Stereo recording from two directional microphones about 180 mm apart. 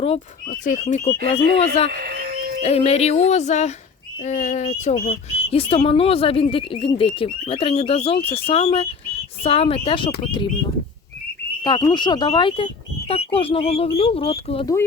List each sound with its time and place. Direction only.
0.4 s speech: 45° left (ahead or behind)
1.9 s speech: 60° right (ahead or behind)
2.6 s speech: 35° left (ahead or behind)
11.6 s speech: 25° left (ahead or behind)